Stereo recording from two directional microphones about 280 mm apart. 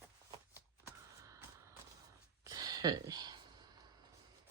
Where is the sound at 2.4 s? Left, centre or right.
Centre.